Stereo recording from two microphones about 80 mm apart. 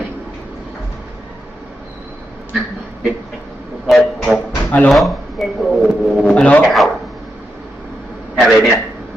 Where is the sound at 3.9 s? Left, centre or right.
Centre.